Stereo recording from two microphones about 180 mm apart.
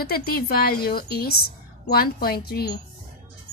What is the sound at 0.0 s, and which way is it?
A woman's voice, 55° left (ahead or behind).